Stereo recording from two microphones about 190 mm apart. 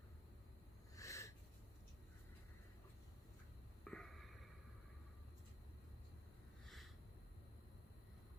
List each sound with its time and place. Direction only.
0.9 s wheeze: 15° left (ahead or behind)
3.8 s wheeze: 5° left (ahead or behind)
6.7 s a sound: centre (ahead or behind)